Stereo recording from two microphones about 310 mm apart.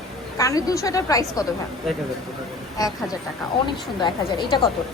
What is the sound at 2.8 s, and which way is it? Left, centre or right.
Speech, centre.